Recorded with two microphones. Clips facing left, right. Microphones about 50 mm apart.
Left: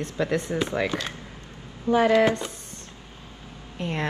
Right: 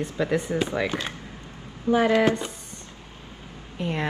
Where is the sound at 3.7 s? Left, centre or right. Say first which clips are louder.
Right 1 dB; centre.